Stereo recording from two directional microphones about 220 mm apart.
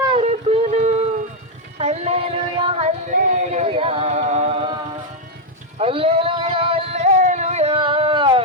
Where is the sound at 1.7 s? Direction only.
30° right (ahead or behind).